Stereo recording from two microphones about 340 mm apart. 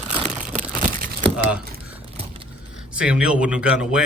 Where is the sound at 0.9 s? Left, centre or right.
Right.